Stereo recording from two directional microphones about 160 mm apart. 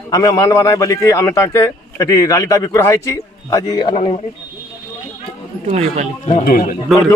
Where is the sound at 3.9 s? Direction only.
40° left (ahead or behind).